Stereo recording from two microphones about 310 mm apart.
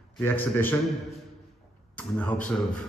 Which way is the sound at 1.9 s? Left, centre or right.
Centre.